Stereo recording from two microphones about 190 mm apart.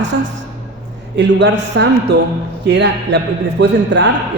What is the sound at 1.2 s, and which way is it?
A man's voice, 70° right (ahead or behind).